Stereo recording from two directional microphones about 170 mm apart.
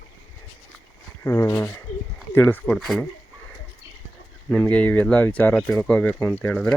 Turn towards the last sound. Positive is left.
turn(degrees=10)  # may be behind; listen again after turning